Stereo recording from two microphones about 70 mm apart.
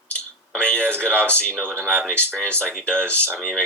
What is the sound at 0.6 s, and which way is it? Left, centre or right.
Speech, centre.